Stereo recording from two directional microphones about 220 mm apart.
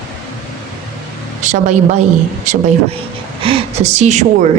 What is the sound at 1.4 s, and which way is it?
A woman's voice, 35° right (ahead or behind).